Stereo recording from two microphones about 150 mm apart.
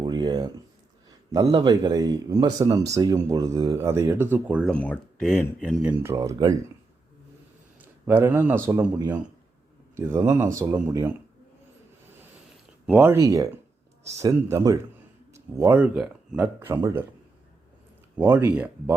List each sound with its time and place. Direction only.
0.0 s a sound: 30° right (ahead or behind)
1.5 s speech: 30° right (ahead or behind); by 4.7 s 10° right (ahead or behind)
4.7 s speech: 10° left (ahead or behind)
5.8 s speech: 15° right (ahead or behind)
7.8 s speech: 15° right (ahead or behind)
12.9 s speech: 15° right (ahead or behind)
18.2 s speech: 15° right (ahead or behind)